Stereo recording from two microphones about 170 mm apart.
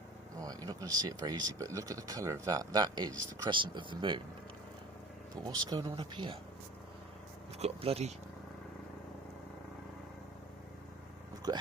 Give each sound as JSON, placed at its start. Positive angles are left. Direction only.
{"t": 0.3, "sound": "speech", "side_deg": -20}
{"t": 5.5, "sound": "speech", "side_deg": -25}
{"t": 7.6, "sound": "speech", "side_deg": -35}
{"t": 11.5, "sound": "speech", "side_deg": -25}